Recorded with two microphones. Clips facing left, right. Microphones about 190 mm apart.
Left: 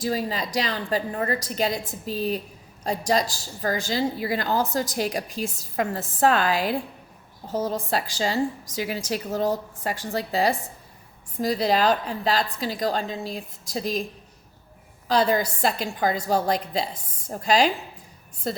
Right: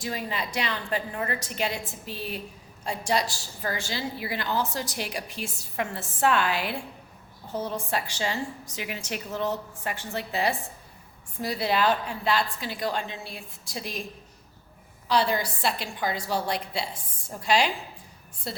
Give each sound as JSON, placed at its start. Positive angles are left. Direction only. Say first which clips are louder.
{"t": 0.0, "sound": "a woman's voice", "louder": "left 6 dB", "side_deg": 35}
{"t": 5.3, "sound": "a woman's voice", "louder": "left 6 dB", "side_deg": 90}
{"t": 5.7, "sound": "a woman's voice", "louder": "left 4 dB", "side_deg": 40}
{"t": 15.0, "sound": "a woman's voice", "louder": "left 4 dB", "side_deg": 45}